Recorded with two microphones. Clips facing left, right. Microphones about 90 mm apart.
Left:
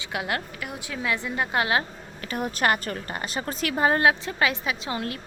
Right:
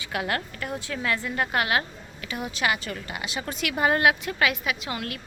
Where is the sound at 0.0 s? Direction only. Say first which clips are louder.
Right 1 dB; 20° left (ahead or behind).